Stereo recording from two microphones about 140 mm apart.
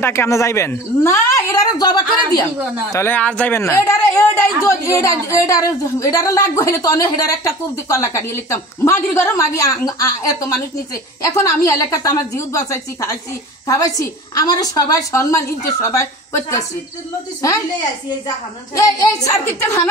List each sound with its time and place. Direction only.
0.0 s a man's voice: 20° left (ahead or behind)
2.9 s a man's voice: 15° left (ahead or behind)
18.8 s a man's voice: 25° left (ahead or behind)